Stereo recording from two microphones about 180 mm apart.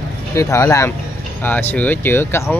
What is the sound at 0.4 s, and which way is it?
Speech, 15° left (ahead or behind).